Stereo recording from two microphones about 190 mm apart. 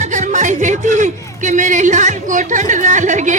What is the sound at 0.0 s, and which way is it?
A woman's voice, 40° right (ahead or behind).